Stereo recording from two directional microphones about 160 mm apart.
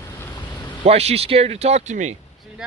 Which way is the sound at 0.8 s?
40° right (ahead or behind).